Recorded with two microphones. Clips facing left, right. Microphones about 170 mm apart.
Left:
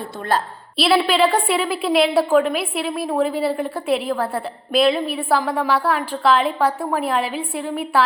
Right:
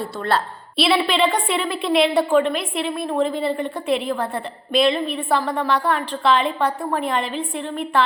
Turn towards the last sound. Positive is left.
turn(degrees=5)  # may be behind; listen again after turning